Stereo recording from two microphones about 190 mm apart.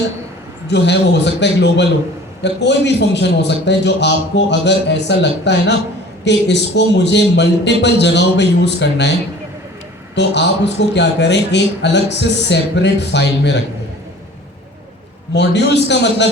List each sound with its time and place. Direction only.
0.7 s a man's voice: 65° left (ahead or behind)
10.2 s a man's voice: 65° left (ahead or behind)
15.3 s a man's voice: 65° left (ahead or behind)